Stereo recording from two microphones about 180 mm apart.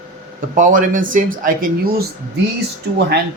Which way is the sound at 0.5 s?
45° right (ahead or behind).